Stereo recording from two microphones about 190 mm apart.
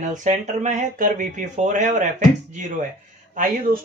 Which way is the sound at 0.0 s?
40° right (ahead or behind).